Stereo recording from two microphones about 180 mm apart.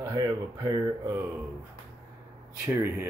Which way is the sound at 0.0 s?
20° right (ahead or behind).